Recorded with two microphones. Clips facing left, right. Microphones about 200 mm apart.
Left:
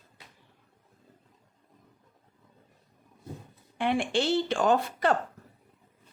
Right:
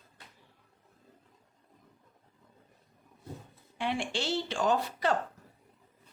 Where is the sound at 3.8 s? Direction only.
55° left (ahead or behind).